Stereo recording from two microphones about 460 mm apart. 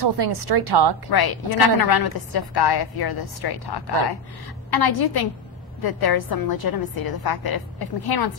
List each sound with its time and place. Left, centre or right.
0.0 s a woman's voice: right
1.1 s a woman's voice: left